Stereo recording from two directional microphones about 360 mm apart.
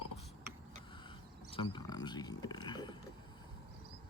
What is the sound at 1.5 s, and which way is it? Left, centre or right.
Speech, centre.